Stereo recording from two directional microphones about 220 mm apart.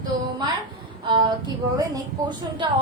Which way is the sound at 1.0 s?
20° right (ahead or behind).